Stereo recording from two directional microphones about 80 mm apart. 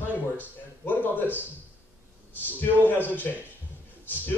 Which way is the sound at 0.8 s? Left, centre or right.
Left.